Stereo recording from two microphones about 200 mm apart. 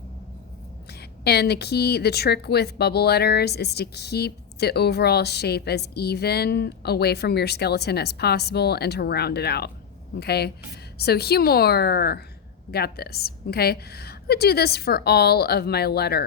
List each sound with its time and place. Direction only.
1.2 s speech: 55° left (ahead or behind)